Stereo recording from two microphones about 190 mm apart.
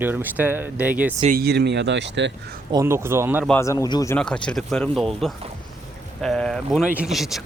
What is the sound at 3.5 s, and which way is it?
Speech, 15° left (ahead or behind).